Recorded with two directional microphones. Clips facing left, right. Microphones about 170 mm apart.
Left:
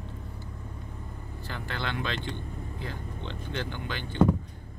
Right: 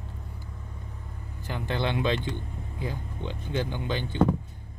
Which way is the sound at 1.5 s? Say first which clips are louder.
Right 6 dB; 20° right (ahead or behind).